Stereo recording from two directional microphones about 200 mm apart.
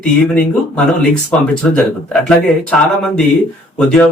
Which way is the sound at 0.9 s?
5° left (ahead or behind).